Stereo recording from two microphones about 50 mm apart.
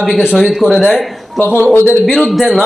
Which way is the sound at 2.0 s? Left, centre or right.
Centre.